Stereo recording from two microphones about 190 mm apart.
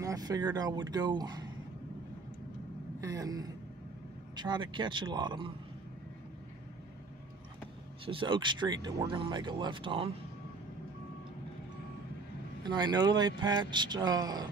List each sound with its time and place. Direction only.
0.0 s speech: 20° right (ahead or behind)
3.0 s speech: 15° right (ahead or behind)
8.0 s speech: 25° right (ahead or behind)
12.6 s speech: 20° right (ahead or behind)